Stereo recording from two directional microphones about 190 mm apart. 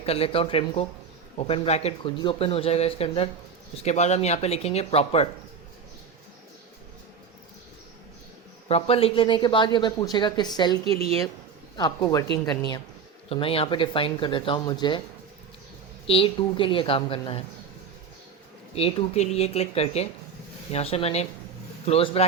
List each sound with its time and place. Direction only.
0.0 s speech: 30° left (ahead or behind)
8.6 s speech: 30° left (ahead or behind)
11.8 s speech: 20° left (ahead or behind)
16.0 s speech: 30° left (ahead or behind)
18.8 s speech: 30° left (ahead or behind)